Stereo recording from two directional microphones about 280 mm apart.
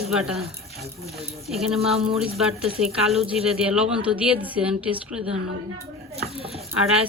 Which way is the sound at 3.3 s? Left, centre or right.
Centre.